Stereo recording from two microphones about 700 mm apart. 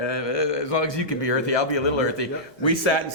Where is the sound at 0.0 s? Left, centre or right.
Left.